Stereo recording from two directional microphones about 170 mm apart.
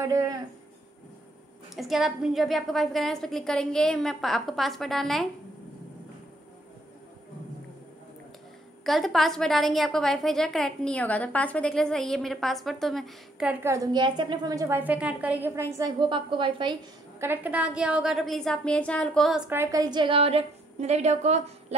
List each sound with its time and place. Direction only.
0.0 s a woman's voice: 20° right (ahead or behind)
1.8 s a woman's voice: centre (ahead or behind)
8.8 s a woman's voice: centre (ahead or behind); by 15.9 s 15° right (ahead or behind)
16.0 s a woman's voice: 30° right (ahead or behind)
17.2 s a woman's voice: 10° right (ahead or behind); by 21.7 s 40° right (ahead or behind)